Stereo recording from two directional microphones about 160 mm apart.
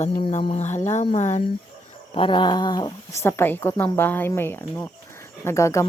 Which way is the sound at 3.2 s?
15° left (ahead or behind).